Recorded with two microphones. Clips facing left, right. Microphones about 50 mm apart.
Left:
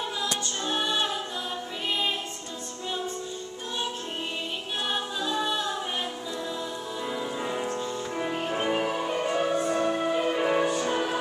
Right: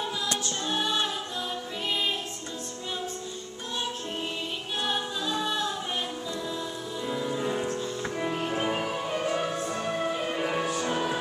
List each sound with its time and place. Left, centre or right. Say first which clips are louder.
0.7 s music: left 1 dB; centre
4.8 s a capella: even; centre
7.1 s music: right 3 dB; centre